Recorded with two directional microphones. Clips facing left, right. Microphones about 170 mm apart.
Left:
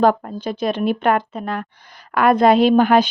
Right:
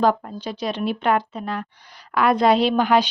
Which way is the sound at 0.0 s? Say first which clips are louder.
Left 4 dB; 50° left (ahead or behind).